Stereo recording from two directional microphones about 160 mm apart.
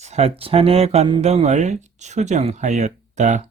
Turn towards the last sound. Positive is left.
turn(degrees=-50)  # may be behind; listen again after turning